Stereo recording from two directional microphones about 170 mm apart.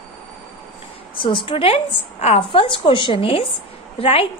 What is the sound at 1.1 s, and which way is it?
A woman's voice, 30° left (ahead or behind).